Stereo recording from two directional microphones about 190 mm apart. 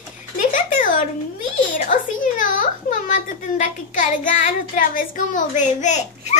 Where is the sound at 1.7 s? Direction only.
45° left (ahead or behind).